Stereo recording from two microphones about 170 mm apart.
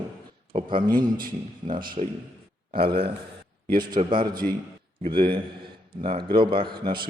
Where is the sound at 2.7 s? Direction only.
65° right (ahead or behind).